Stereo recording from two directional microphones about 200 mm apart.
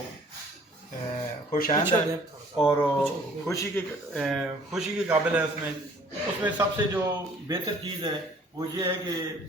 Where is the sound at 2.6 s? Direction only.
5° left (ahead or behind).